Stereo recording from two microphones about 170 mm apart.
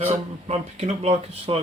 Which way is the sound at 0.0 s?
40° right (ahead or behind).